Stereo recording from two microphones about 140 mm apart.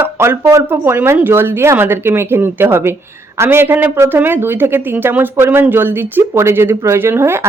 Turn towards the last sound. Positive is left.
turn(degrees=-15)  # may be behind; listen again after turning